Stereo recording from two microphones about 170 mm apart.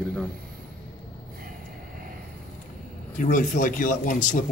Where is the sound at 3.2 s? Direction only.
50° left (ahead or behind).